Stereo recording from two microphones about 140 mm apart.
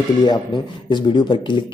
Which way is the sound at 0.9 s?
35° left (ahead or behind).